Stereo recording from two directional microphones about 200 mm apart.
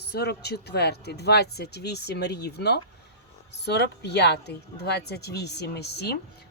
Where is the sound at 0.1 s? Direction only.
55° left (ahead or behind).